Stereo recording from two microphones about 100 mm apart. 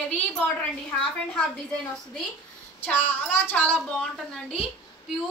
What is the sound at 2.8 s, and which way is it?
A woman's voice, 15° left (ahead or behind).